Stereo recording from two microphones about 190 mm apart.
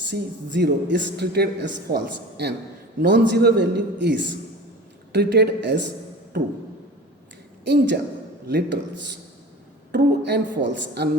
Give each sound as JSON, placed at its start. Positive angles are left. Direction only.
{"t": 0.1, "sound": "a man's voice", "side_deg": -65}
{"t": 7.6, "sound": "a man's voice", "side_deg": -65}
{"t": 9.9, "sound": "a man's voice", "side_deg": -60}